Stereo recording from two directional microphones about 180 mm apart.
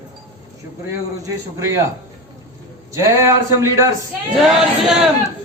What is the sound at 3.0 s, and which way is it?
Speech, 15° right (ahead or behind).